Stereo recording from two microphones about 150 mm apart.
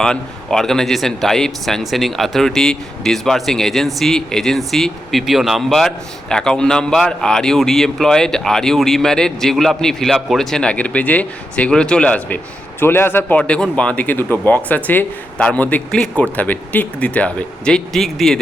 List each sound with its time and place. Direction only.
0.0 s speech: 5° left (ahead or behind)